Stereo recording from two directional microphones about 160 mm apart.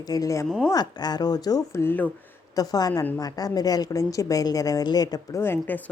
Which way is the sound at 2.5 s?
25° left (ahead or behind).